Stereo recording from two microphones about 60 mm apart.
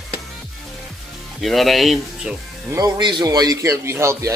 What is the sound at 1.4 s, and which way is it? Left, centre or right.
Speech, centre.